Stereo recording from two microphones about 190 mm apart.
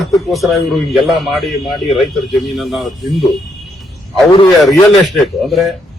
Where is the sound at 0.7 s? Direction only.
Centre (ahead or behind).